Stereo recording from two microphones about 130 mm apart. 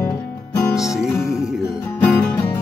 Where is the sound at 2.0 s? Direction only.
15° left (ahead or behind).